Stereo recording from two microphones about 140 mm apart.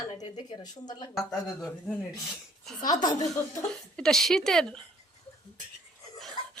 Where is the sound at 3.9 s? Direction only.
5° left (ahead or behind).